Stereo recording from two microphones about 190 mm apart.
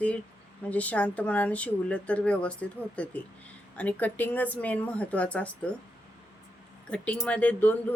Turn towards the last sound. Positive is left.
turn(degrees=10)  # may be behind; listen again after turning